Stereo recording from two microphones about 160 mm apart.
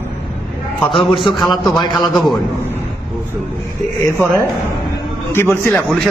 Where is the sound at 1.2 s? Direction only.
Centre (ahead or behind).